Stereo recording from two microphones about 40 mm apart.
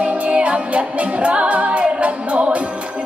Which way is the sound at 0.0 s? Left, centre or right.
Right.